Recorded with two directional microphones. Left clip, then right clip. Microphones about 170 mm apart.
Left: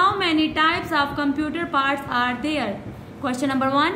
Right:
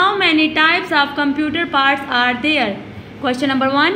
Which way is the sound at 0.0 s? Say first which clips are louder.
Right 5 dB; 25° right (ahead or behind).